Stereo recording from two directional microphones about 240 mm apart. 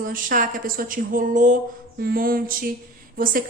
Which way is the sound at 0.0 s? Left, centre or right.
Right.